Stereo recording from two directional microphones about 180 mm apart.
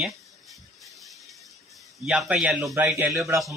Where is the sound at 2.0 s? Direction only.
Centre (ahead or behind).